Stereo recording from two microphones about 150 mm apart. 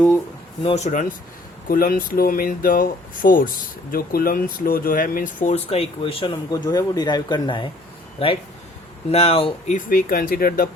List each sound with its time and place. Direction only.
0.6 s speech: 45° left (ahead or behind)
1.6 s speech: 70° left (ahead or behind); by 6.3 s 35° left (ahead or behind)
6.5 s speech: 25° left (ahead or behind)
9.1 s speech: 40° left (ahead or behind)
9.7 s speech: 70° left (ahead or behind)